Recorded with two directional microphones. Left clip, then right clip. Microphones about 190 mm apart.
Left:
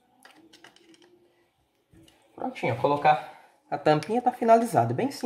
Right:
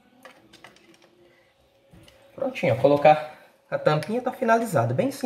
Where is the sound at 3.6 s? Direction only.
40° left (ahead or behind).